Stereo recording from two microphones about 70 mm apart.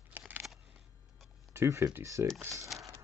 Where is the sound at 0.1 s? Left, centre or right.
Right.